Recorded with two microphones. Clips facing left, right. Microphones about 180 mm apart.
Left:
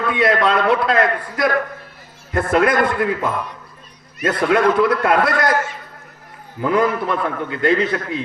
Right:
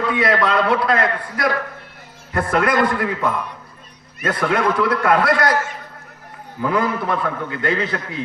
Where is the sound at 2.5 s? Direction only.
25° left (ahead or behind).